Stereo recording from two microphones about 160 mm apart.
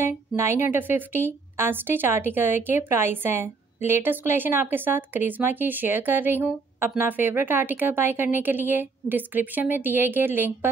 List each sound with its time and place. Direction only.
0.0 s a woman's voice: 15° right (ahead or behind)